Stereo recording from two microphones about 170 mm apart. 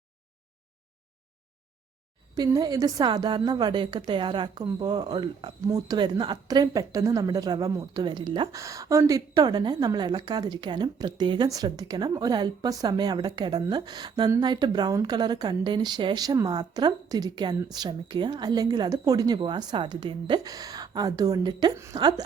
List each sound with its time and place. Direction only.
2.3 s a woman's voice: 20° right (ahead or behind)